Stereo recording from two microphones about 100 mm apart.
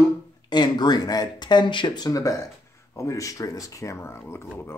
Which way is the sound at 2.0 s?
35° left (ahead or behind).